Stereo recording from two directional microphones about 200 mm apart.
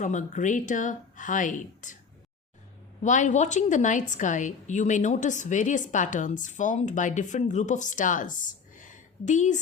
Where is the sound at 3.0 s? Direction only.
40° left (ahead or behind).